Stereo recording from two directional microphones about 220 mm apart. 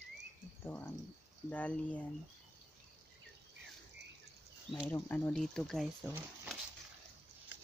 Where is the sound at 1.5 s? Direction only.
5° left (ahead or behind).